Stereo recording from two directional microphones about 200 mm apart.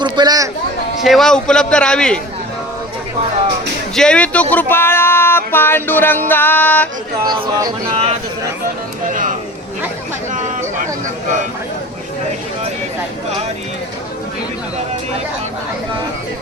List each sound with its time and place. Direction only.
0.0 s speech: 20° right (ahead or behind)
1.0 s a man's voice: centre (ahead or behind)
3.9 s speech: 5° left (ahead or behind)
5.5 s music: 10° left (ahead or behind)
7.3 s a sound: 25° right (ahead or behind)
8.6 s speech: 40° right (ahead or behind)